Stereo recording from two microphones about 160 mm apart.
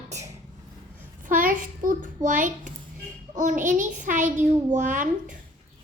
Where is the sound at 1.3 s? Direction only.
55° right (ahead or behind).